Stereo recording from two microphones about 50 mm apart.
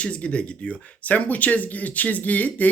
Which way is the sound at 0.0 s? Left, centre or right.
Left.